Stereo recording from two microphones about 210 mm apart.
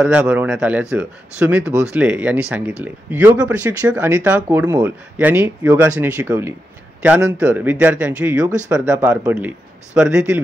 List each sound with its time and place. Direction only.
0.0 s speech: 5° right (ahead or behind)